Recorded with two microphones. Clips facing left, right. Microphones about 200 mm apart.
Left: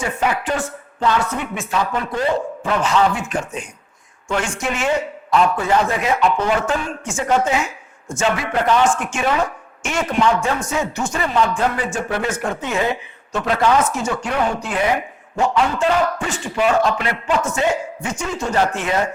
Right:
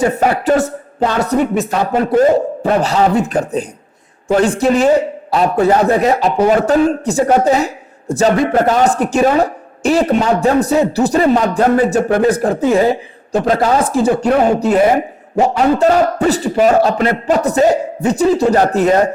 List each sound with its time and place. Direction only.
0.0 s a man's voice: 40° right (ahead or behind)